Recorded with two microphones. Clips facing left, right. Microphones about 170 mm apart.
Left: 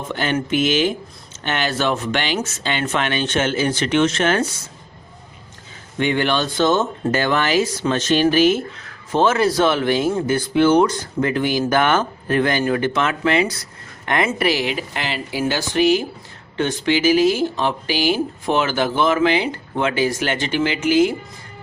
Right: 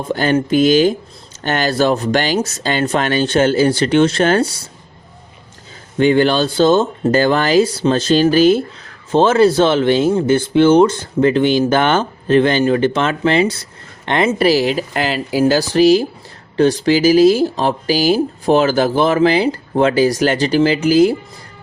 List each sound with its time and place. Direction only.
0.1 s speech: 40° right (ahead or behind)
6.0 s speech: 35° right (ahead or behind)